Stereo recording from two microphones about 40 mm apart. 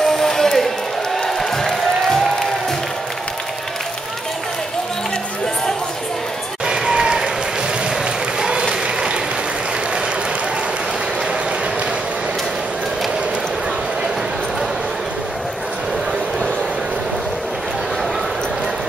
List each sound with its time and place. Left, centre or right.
0.2 s a sound: centre
1.2 s music: centre
6.6 s applause: centre
8.4 s applause: centre